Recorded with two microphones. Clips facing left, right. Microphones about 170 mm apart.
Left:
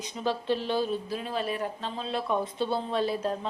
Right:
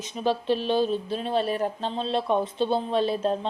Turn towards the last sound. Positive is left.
turn(degrees=-25)  # may be behind; listen again after turning